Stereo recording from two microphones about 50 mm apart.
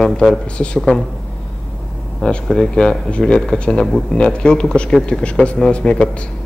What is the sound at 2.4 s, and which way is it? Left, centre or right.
A man's voice, centre.